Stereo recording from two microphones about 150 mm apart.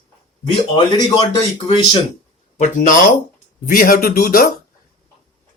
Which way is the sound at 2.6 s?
60° left (ahead or behind).